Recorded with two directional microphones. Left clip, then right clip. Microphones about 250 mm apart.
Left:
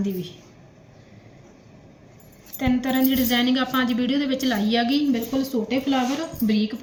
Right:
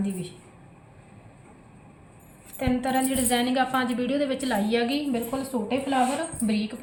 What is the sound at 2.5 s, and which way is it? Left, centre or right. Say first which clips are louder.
A woman's voice: left 2 dB; centre.